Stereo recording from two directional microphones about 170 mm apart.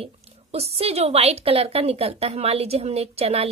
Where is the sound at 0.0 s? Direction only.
35° right (ahead or behind).